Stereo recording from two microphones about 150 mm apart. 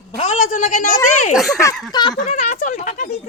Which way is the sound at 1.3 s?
Centre (ahead or behind).